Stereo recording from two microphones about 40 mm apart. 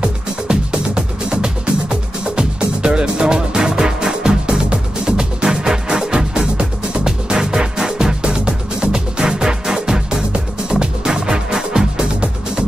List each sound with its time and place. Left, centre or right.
0.0 s music: right